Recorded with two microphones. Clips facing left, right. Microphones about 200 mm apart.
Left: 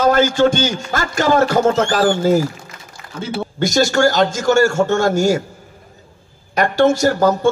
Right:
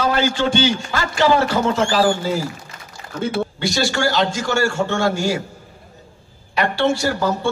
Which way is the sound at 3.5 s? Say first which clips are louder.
Left 6 dB; 45° left (ahead or behind).